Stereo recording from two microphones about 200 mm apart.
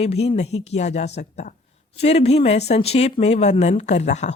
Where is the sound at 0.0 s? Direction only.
30° left (ahead or behind).